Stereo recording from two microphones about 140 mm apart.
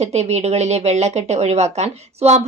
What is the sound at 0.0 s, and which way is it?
Speech, 50° right (ahead or behind).